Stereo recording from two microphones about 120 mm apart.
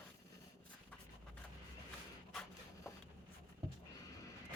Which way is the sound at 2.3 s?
Centre (ahead or behind).